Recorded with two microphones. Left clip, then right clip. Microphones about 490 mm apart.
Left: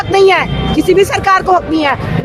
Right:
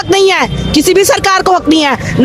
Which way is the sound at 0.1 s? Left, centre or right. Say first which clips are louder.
Even; right.